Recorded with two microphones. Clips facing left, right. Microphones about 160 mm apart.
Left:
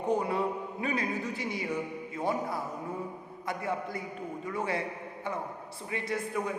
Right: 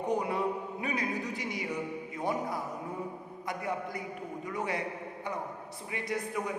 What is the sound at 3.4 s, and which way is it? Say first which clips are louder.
A woman's voice: left 2 dB; 20° right (ahead or behind).